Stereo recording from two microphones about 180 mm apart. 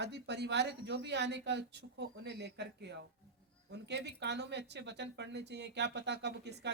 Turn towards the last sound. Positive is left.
turn(degrees=-70)  # may be behind; listen again after turning